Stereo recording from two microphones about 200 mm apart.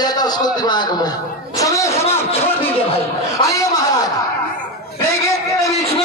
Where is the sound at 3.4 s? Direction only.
20° left (ahead or behind).